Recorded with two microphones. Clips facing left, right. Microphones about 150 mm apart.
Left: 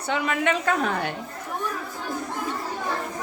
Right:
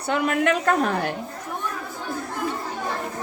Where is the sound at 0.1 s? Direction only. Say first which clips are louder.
Right 3 dB; 50° right (ahead or behind).